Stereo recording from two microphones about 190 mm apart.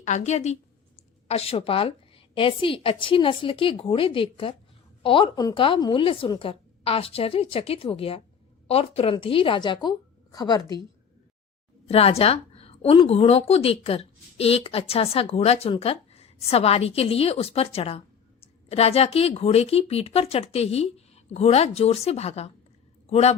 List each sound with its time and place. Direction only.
0.0 s a woman's voice: 40° left (ahead or behind); by 10.8 s 20° left (ahead or behind)
11.9 s a woman's voice: 30° left (ahead or behind)